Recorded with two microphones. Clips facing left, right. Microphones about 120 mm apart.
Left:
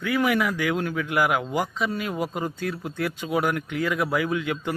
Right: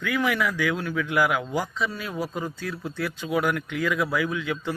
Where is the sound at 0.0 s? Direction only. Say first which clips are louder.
Left 2 dB; 40° left (ahead or behind).